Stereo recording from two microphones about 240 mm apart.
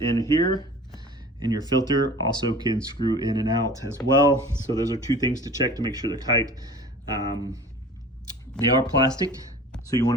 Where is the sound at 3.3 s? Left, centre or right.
Centre.